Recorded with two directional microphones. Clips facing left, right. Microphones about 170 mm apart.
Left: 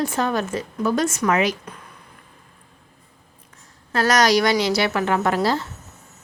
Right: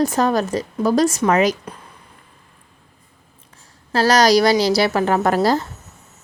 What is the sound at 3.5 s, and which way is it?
A woman's voice, 30° right (ahead or behind).